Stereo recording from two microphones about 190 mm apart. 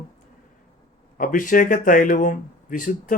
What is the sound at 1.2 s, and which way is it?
Speech, 45° left (ahead or behind).